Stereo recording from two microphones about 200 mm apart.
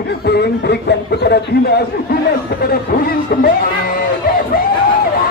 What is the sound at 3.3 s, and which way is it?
Speech, 50° left (ahead or behind).